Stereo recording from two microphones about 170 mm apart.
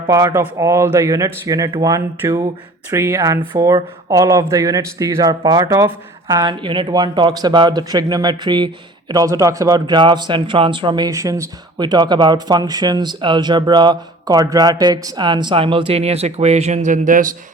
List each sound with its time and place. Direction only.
0.1 s speech: 20° right (ahead or behind); by 17.2 s 50° right (ahead or behind)